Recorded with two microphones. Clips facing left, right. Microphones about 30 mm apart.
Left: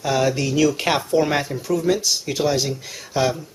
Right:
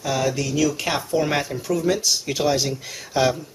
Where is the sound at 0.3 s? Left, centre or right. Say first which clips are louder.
Left 3 dB; left.